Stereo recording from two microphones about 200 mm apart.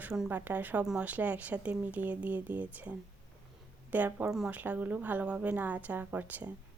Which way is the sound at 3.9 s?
10° right (ahead or behind).